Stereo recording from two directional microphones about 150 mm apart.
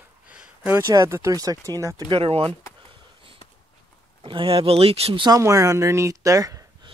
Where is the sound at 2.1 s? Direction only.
40° right (ahead or behind).